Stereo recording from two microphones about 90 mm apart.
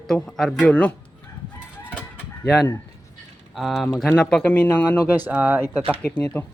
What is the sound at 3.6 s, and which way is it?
Speech, centre (ahead or behind).